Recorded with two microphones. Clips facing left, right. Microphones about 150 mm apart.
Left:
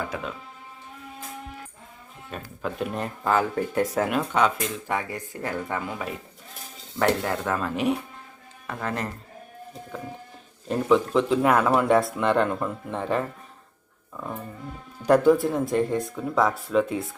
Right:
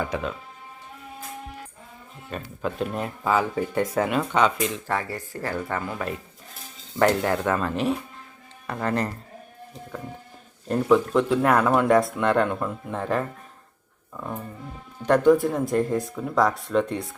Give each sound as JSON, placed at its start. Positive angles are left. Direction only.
{"t": 0.0, "sound": "speech", "side_deg": 0}
{"t": 2.6, "sound": "speech", "side_deg": 0}
{"t": 4.9, "sound": "speech", "side_deg": 20}
{"t": 7.0, "sound": "speech", "side_deg": 0}
{"t": 10.7, "sound": "speech", "side_deg": 0}
{"t": 15.0, "sound": "speech", "side_deg": 10}